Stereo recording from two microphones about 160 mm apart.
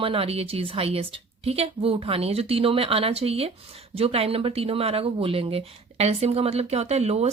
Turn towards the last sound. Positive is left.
turn(degrees=-40)  # may be behind; listen again after turning